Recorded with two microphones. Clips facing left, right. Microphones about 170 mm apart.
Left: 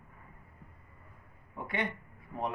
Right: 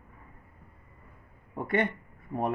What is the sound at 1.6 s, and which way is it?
Speech, 50° right (ahead or behind).